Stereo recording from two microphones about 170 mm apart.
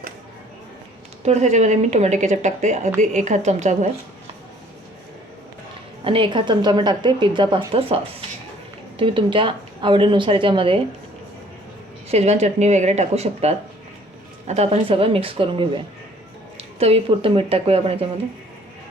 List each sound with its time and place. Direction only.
1.2 s speech: 40° right (ahead or behind)
6.1 s a woman's voice: 30° right (ahead or behind)
9.0 s a woman's voice: 30° right (ahead or behind)
12.0 s speech: 40° right (ahead or behind)